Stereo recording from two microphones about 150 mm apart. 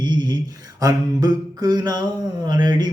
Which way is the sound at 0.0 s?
30° right (ahead or behind).